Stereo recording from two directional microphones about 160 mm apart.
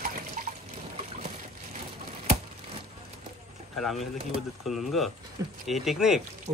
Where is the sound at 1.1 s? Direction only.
45° right (ahead or behind).